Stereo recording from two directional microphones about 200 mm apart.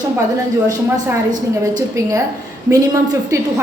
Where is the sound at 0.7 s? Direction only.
15° right (ahead or behind).